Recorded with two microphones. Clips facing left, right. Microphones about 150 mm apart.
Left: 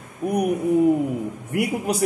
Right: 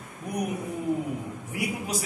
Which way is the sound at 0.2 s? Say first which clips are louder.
Left 11 dB; 60° left (ahead or behind).